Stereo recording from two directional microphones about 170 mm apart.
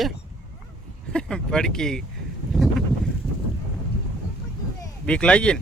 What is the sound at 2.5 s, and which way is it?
Boat, centre (ahead or behind).